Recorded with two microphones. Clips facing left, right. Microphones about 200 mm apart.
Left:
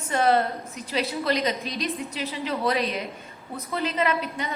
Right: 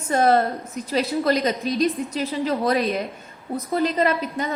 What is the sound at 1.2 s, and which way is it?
A woman's voice, 45° right (ahead or behind).